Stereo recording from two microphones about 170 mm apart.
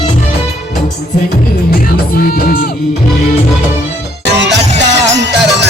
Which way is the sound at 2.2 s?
60° left (ahead or behind).